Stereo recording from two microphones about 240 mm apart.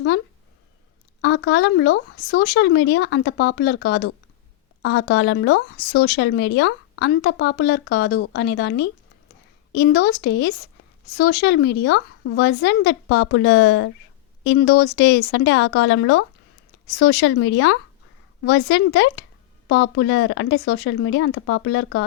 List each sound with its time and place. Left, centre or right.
1.2 s speech: left